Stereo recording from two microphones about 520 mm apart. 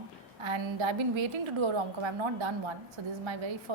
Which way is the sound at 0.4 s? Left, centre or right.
Right.